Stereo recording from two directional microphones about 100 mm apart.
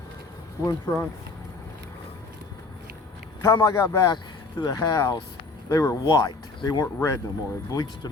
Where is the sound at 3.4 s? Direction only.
30° left (ahead or behind).